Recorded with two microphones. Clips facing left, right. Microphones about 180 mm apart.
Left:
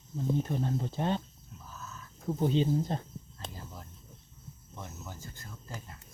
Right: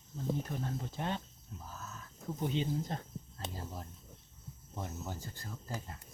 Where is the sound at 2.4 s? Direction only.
35° left (ahead or behind).